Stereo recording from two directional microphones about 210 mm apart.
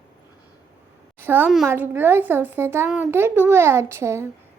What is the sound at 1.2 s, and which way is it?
A child's voice, 10° right (ahead or behind).